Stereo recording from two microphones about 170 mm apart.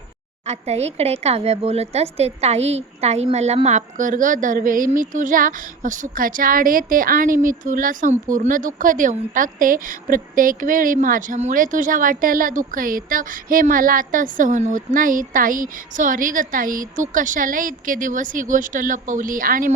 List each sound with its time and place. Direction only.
0.4 s speech: 40° right (ahead or behind); by 19.7 s 55° right (ahead or behind)